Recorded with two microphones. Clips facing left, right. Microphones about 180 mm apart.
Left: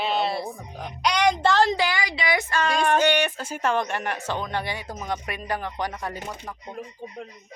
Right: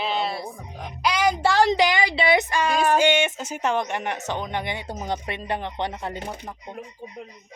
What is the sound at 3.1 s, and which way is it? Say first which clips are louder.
Speech: right 1 dB; 20° right (ahead or behind).